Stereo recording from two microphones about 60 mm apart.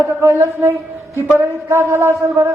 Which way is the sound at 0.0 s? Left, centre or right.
Right.